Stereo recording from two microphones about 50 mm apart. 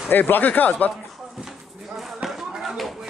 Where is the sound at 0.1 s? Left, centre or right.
Left.